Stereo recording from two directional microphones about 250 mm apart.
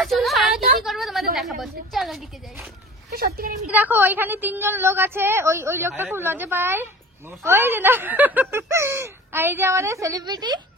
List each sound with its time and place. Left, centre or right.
0.0 s a sound: centre
0.8 s a woman's voice: centre
3.1 s a woman's voice: right
3.6 s a woman's voice: centre